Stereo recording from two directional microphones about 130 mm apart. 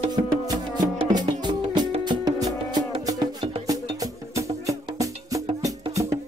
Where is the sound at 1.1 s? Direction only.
35° right (ahead or behind).